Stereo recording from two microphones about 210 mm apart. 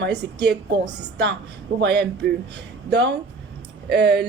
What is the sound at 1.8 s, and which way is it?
Speech, 55° right (ahead or behind).